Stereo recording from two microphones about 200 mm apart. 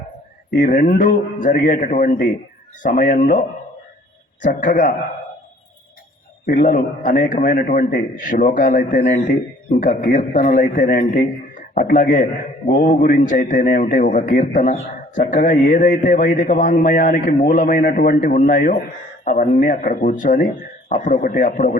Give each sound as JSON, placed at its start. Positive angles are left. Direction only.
{"t": 0.6, "sound": "a man's voice", "side_deg": 40}
{"t": 4.6, "sound": "a man's voice", "side_deg": 40}
{"t": 6.4, "sound": "a man's voice", "side_deg": 40}